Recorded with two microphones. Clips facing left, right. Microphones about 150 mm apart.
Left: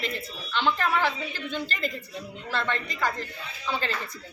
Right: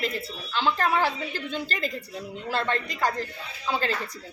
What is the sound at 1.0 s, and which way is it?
Speech, 40° right (ahead or behind).